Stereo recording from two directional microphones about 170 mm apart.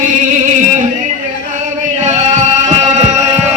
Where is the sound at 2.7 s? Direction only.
40° right (ahead or behind).